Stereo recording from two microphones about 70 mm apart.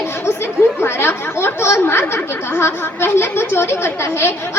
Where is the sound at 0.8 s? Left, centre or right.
Left.